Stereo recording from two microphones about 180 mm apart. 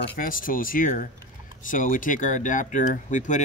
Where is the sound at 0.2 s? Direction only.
50° left (ahead or behind).